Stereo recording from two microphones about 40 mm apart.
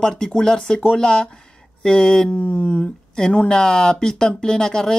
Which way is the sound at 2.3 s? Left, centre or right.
Left.